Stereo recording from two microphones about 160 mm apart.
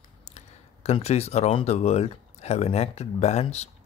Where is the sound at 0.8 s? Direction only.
40° left (ahead or behind).